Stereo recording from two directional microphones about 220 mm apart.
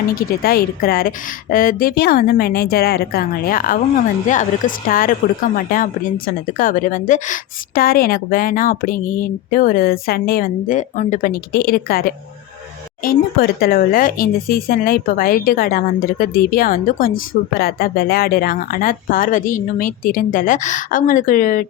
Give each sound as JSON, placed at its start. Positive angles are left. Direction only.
{"t": 0.2, "sound": "a woman's voice", "side_deg": 45}